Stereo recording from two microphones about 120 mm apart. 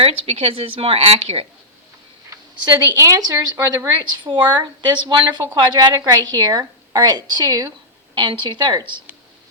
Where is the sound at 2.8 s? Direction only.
30° right (ahead or behind).